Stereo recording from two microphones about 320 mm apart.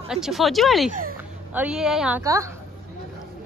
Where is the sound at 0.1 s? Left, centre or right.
Centre.